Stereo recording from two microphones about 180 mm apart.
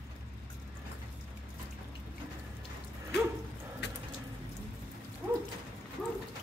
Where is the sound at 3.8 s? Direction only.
75° left (ahead or behind).